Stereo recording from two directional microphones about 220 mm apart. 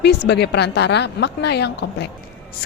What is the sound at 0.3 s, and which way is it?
Speech, 50° left (ahead or behind).